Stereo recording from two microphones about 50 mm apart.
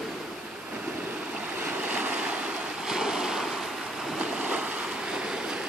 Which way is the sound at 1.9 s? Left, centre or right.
Right.